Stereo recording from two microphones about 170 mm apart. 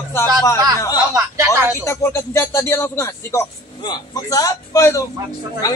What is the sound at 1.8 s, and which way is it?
A woman's voice, 15° left (ahead or behind).